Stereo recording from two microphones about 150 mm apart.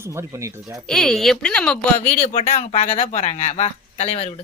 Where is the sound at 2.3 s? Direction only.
50° left (ahead or behind).